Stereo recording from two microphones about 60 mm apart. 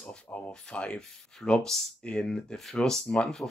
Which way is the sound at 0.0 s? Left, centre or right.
Centre.